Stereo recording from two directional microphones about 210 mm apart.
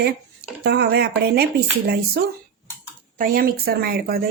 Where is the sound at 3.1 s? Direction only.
45° right (ahead or behind).